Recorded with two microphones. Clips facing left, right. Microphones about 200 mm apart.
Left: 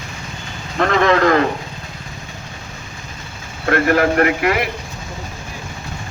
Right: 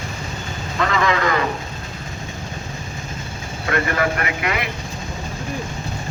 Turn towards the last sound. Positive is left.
turn(degrees=50)  # may be behind; listen again after turning